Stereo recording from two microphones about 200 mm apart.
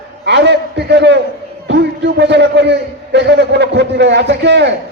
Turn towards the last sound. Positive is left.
turn(degrees=-60)  # may be behind; listen again after turning